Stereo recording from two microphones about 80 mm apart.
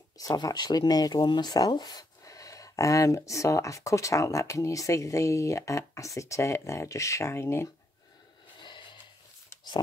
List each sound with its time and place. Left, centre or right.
0.2 s speech: left
8.5 s wheeze: left